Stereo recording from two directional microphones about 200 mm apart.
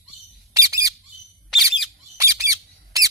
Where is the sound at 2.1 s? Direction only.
15° right (ahead or behind).